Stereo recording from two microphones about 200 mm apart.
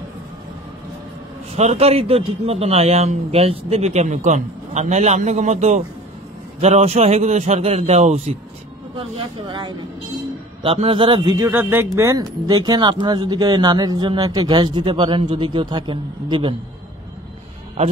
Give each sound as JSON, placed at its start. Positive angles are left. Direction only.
{"t": 1.5, "sound": "speech", "side_deg": -35}
{"t": 9.5, "sound": "a man's voice", "side_deg": -20}